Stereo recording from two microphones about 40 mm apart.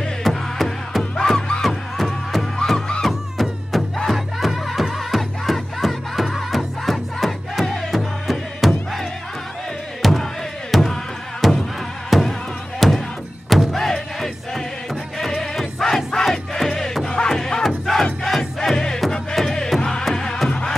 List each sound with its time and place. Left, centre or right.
0.2 s music: centre
10.0 s music: centre
17.6 s battle cry: centre
18.2 s music: centre